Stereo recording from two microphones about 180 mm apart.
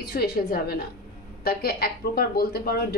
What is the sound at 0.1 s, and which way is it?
Speech, 60° left (ahead or behind).